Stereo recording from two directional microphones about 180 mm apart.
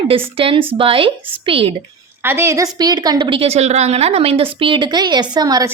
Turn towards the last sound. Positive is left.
turn(degrees=-20)  # may be behind; listen again after turning